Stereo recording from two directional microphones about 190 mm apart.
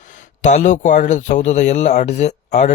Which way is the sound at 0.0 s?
40° left (ahead or behind).